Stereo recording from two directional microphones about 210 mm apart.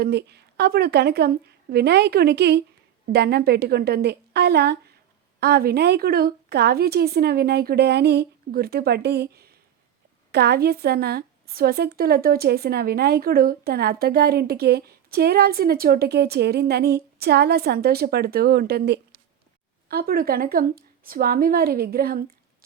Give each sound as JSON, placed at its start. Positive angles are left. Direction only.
{"t": 0.0, "sound": "a woman's voice", "side_deg": -50}